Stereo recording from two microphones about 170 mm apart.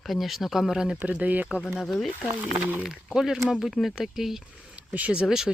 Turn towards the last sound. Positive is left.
turn(degrees=-5)  # may be behind; listen again after turning